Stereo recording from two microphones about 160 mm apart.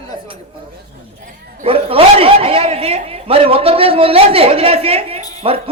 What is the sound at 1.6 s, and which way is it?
A man's voice, 35° right (ahead or behind).